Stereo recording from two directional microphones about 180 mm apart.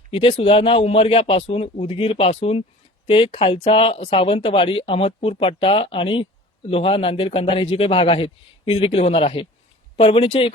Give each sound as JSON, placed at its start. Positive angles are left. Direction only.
{"t": 0.1, "sound": "a man's voice", "side_deg": 30}